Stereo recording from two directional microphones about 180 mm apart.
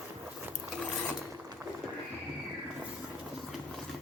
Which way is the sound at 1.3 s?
15° right (ahead or behind).